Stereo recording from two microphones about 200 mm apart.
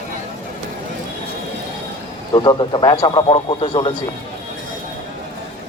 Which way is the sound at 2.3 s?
20° left (ahead or behind).